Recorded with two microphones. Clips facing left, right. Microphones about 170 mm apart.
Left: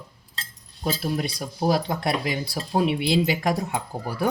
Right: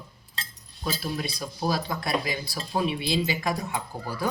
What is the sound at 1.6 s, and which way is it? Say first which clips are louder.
Speech: left 5 dB; 65° left (ahead or behind).